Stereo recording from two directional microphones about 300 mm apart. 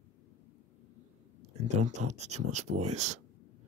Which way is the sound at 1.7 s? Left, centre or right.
Right.